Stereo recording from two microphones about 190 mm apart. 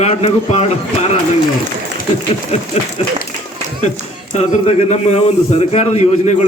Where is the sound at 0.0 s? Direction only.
35° left (ahead or behind).